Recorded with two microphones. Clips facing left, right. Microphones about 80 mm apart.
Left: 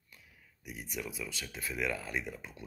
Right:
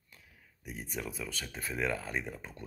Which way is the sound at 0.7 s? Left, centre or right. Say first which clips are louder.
Right 1 dB; right.